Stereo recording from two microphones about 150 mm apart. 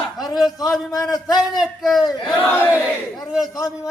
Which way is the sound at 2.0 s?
30° left (ahead or behind).